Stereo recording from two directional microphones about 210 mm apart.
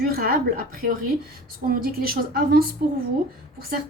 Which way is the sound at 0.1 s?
45° right (ahead or behind).